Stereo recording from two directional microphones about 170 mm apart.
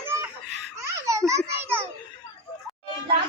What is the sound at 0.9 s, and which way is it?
Baby laughter, 20° right (ahead or behind).